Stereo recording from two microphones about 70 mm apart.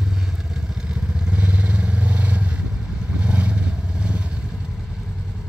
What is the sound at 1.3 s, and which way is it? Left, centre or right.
Vehicle, centre.